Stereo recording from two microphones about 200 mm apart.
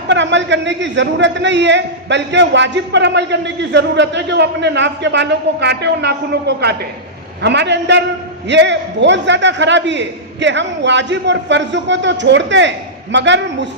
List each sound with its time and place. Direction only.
0.1 s a man's voice: 65° right (ahead or behind)